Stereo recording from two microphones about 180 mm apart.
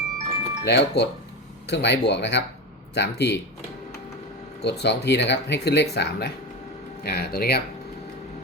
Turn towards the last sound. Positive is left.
turn(degrees=60)  # may be behind; listen again after turning